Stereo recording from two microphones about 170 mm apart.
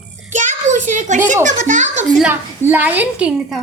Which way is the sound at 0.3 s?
45° right (ahead or behind).